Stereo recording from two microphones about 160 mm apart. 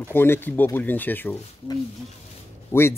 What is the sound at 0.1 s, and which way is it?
Speech, 15° left (ahead or behind).